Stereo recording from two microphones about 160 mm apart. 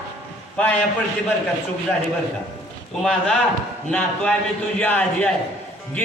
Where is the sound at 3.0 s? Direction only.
5° left (ahead or behind).